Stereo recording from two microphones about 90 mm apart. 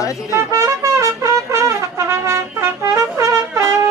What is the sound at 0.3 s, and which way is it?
Speech, 35° right (ahead or behind).